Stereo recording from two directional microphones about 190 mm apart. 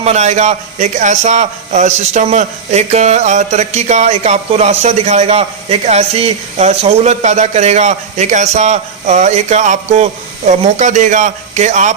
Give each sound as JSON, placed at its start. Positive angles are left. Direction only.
{"t": 0.0, "sound": "a man's voice", "side_deg": -35}